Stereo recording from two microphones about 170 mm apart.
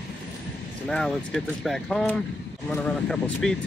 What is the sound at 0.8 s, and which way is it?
Speech, 5° left (ahead or behind).